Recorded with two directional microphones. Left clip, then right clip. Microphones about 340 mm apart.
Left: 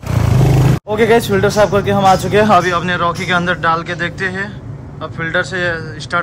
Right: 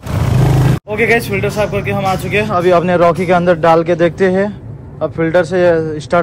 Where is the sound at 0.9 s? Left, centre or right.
Left.